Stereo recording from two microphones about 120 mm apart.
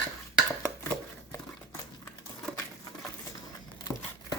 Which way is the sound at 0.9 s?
20° left (ahead or behind).